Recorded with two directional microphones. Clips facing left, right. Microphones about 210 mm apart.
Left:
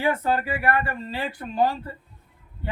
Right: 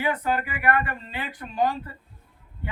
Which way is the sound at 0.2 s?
30° left (ahead or behind).